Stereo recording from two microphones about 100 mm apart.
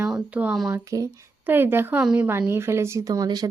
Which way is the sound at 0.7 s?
35° right (ahead or behind).